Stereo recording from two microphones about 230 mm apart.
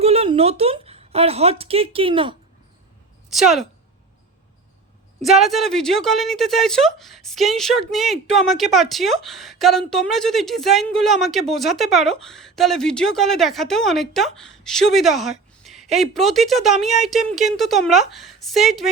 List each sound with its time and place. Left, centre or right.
0.0 s speech: right
3.2 s a woman's voice: centre
5.2 s a woman's voice: centre